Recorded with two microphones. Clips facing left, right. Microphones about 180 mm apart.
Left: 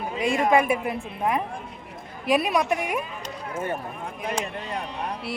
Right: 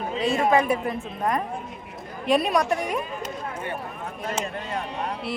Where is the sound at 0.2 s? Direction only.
15° left (ahead or behind).